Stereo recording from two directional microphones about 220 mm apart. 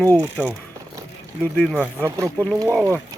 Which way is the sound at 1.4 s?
5° left (ahead or behind).